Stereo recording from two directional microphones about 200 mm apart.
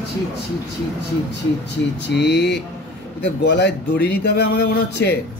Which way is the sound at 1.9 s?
60° left (ahead or behind).